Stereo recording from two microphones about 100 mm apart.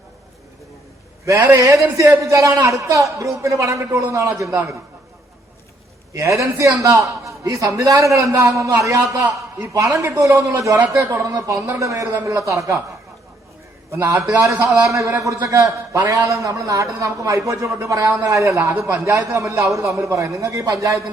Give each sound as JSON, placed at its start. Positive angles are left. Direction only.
{"t": 1.2, "sound": "a man's voice", "side_deg": -30}
{"t": 6.1, "sound": "a man's voice", "side_deg": -30}
{"t": 13.9, "sound": "a man's voice", "side_deg": -30}